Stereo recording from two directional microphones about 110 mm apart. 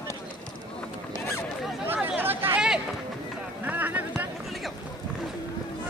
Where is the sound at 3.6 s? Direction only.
15° right (ahead or behind).